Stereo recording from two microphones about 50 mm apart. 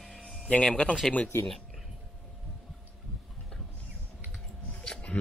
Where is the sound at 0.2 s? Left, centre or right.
Centre.